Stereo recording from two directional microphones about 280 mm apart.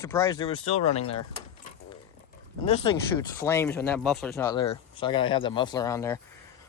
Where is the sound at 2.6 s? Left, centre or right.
Left.